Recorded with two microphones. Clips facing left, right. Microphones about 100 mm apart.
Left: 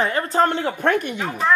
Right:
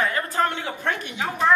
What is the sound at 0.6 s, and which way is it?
Speech, 55° left (ahead or behind).